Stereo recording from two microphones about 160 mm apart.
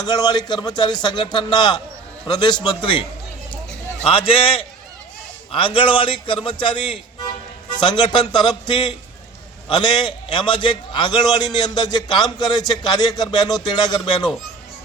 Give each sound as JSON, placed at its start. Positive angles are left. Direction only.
{"t": 0.0, "sound": "a man's voice", "side_deg": 25}
{"t": 4.0, "sound": "a man's voice", "side_deg": 35}